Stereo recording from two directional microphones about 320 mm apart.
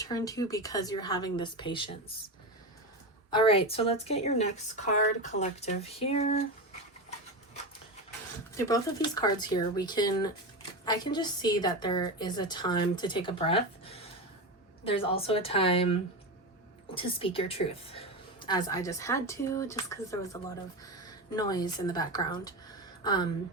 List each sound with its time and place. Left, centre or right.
0.0 s a woman's voice: centre
3.2 s speech: centre
8.5 s a woman's voice: centre